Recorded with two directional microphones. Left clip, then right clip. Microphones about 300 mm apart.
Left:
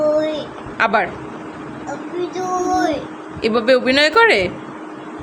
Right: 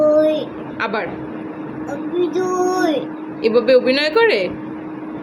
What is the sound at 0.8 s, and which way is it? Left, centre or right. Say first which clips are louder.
Speech: left 6 dB; left.